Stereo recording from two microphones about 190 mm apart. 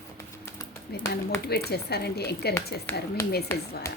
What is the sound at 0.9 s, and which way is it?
A woman's voice, 55° left (ahead or behind).